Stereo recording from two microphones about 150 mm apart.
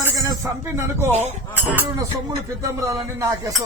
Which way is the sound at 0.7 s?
15° right (ahead or behind).